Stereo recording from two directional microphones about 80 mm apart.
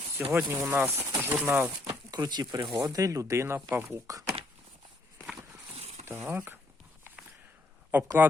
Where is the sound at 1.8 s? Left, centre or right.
Right.